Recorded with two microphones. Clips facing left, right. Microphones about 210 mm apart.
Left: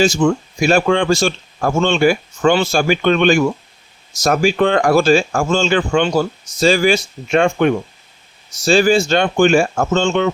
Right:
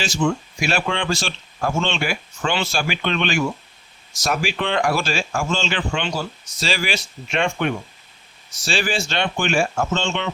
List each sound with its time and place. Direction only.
0.2 s speech: 45° left (ahead or behind)